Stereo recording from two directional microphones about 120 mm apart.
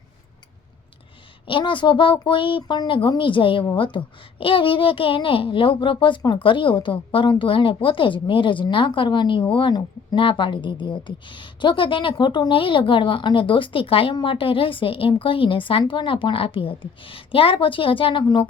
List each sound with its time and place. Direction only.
1.5 s a woman's voice: 45° left (ahead or behind)